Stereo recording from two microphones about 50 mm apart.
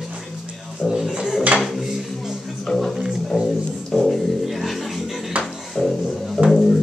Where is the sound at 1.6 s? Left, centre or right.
Centre.